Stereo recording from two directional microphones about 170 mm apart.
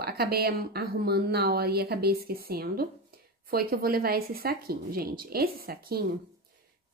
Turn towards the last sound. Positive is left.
turn(degrees=-65)  # may be behind; listen again after turning